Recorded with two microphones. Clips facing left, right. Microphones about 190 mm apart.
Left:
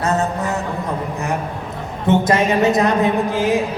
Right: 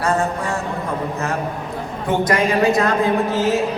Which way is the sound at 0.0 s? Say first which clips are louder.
Left 1 dB; 25° left (ahead or behind).